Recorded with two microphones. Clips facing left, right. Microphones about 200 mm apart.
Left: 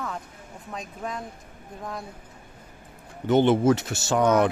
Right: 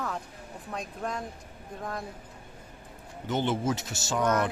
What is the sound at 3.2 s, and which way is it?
Speech, 60° left (ahead or behind).